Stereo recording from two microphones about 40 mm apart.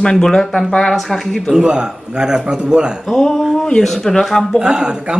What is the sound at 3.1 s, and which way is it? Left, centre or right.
Speech, centre.